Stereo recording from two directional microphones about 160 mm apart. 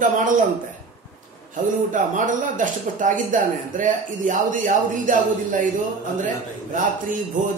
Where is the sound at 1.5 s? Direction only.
55° right (ahead or behind).